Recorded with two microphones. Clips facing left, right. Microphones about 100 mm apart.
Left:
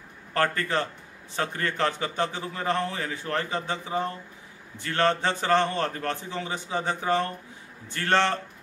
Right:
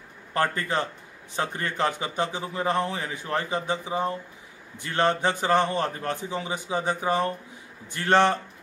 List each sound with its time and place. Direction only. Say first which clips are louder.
0.3 s a man's voice: even; 15° right (ahead or behind)